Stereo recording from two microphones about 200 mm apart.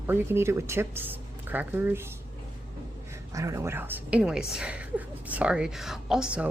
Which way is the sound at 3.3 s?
15° right (ahead or behind).